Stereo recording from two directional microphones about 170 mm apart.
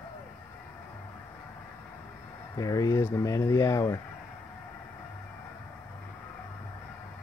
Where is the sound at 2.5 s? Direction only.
20° left (ahead or behind).